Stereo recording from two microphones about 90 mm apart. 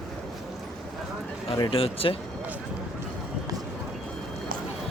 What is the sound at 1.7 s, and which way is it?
Speech, 90° left.